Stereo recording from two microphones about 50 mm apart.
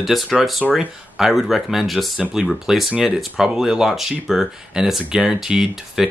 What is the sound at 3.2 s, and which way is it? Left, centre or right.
Speech, centre.